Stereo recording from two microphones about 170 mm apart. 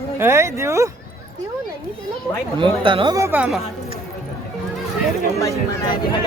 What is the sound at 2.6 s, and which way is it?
Speech, 30° right (ahead or behind).